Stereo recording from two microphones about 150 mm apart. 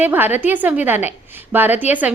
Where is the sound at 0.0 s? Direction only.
10° right (ahead or behind).